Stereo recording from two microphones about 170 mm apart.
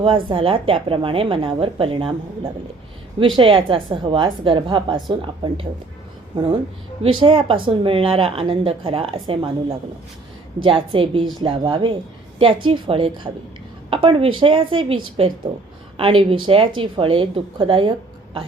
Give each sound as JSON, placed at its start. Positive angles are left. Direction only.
{"t": 0.0, "sound": "a woman's voice", "side_deg": -30}
{"t": 7.0, "sound": "a woman's voice", "side_deg": -30}